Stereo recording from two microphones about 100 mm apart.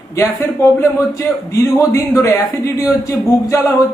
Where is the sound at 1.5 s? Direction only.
30° left (ahead or behind).